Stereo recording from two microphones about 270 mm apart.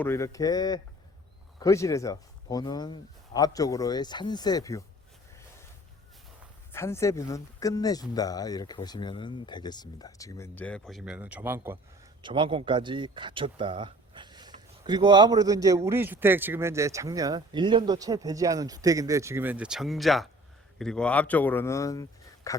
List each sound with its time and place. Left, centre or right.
0.0 s speech: centre
6.7 s speech: centre